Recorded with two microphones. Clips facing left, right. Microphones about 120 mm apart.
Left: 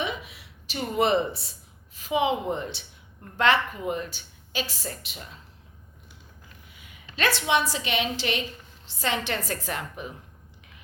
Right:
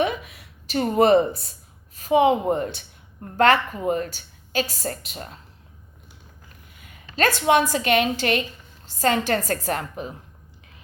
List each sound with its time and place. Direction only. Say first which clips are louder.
0.0 s a sound: right 7 dB; 50° right (ahead or behind)
2.0 s a woman's voice: right 7 dB; 45° right (ahead or behind)
6.7 s a woman's voice: right 7 dB; 50° right (ahead or behind)